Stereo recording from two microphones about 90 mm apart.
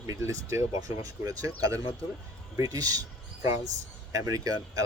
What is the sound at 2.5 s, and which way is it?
Speech, 40° right (ahead or behind).